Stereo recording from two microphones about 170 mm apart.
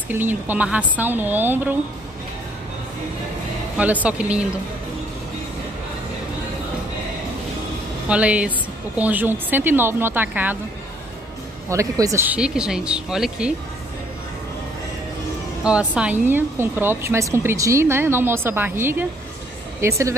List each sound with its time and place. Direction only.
0.1 s speech: 10° right (ahead or behind)
3.7 s speech: 10° right (ahead or behind)
8.1 s speech: 5° right (ahead or behind)
11.7 s speech: 20° right (ahead or behind)
15.6 s speech: 5° right (ahead or behind)